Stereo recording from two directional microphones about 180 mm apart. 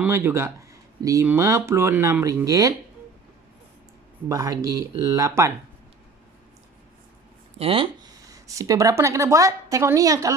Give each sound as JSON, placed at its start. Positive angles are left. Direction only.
{"t": 0.0, "sound": "speech", "side_deg": -15}
{"t": 4.3, "sound": "speech", "side_deg": -20}
{"t": 7.5, "sound": "speech", "side_deg": -30}